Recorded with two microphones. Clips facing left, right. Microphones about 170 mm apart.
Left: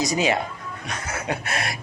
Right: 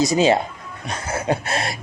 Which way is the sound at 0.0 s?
30° right (ahead or behind).